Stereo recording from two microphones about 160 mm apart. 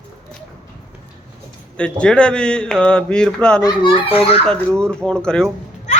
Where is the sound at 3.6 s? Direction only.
30° left (ahead or behind).